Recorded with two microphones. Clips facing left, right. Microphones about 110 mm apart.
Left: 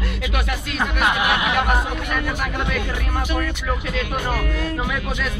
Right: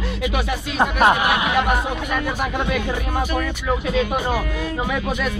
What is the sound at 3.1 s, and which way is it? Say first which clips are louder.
Speech: even; 10° right (ahead or behind).